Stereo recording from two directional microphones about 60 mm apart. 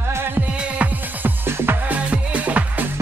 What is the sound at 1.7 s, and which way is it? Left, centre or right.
Music, right.